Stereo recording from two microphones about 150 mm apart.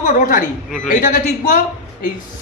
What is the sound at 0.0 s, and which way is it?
Speech, 65° left (ahead or behind).